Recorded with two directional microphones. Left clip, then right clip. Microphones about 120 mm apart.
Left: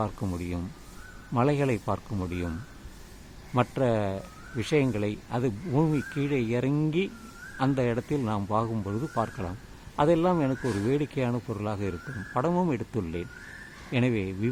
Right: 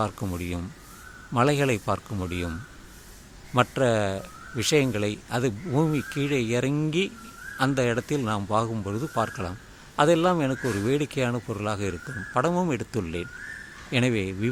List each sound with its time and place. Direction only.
0.0 s a man's voice: 25° right (ahead or behind)
3.5 s a man's voice: 20° right (ahead or behind)